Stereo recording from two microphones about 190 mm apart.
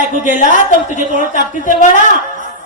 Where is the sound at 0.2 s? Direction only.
40° left (ahead or behind).